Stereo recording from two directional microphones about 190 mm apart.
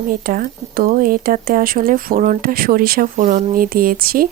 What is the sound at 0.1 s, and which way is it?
Speech, 50° right (ahead or behind).